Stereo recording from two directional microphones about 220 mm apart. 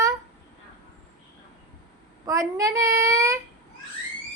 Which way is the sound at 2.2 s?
15° right (ahead or behind).